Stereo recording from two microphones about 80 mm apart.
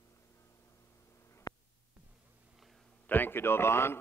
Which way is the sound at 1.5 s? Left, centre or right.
Left.